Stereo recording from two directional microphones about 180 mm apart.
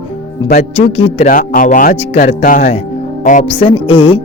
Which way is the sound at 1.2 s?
50° left (ahead or behind).